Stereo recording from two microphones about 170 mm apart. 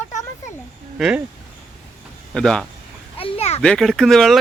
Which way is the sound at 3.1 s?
35° left (ahead or behind).